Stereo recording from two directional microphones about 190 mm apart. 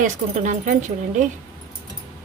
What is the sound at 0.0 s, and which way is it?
Speech, 40° right (ahead or behind).